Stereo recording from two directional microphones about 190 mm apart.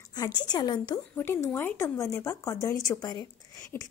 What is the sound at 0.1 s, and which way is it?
Speech, 20° left (ahead or behind).